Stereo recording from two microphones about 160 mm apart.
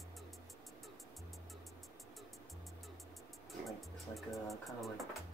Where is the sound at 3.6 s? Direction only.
Centre (ahead or behind).